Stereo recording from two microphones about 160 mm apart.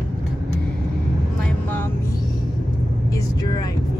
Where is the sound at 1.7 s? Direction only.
10° left (ahead or behind).